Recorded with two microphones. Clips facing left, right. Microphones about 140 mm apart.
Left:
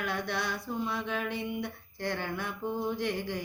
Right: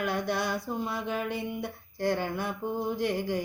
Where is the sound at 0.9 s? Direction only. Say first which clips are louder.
Right 2 dB; 5° right (ahead or behind).